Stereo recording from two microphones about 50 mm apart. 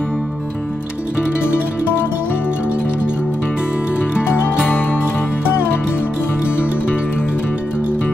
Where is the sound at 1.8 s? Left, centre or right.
Left.